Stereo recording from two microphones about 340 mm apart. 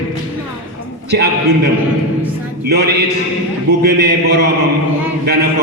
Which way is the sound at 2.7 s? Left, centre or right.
Right.